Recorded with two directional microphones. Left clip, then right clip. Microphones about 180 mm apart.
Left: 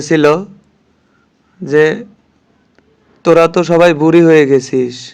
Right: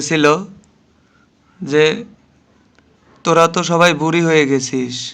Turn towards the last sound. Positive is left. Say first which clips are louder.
# left 6 dB
turn(degrees=25)  # may be behind; listen again after turning